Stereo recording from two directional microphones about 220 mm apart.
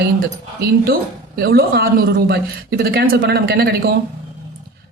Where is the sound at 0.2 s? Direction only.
45° right (ahead or behind).